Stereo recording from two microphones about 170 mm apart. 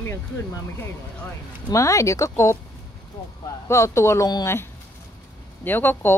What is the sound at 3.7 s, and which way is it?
Speech, 15° left (ahead or behind).